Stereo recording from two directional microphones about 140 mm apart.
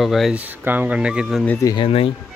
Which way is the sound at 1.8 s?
40° left (ahead or behind).